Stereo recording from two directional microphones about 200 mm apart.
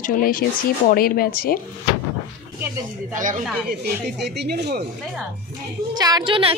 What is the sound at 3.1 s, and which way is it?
Speech, 40° right (ahead or behind).